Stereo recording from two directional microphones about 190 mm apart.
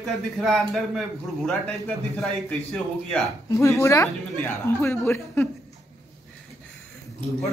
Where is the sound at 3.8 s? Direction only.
15° left (ahead or behind).